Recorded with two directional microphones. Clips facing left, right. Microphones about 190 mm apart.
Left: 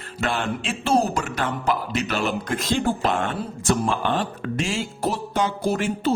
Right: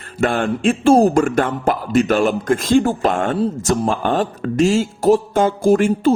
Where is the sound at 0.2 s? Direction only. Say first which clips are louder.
Right 8 dB; 50° right (ahead or behind).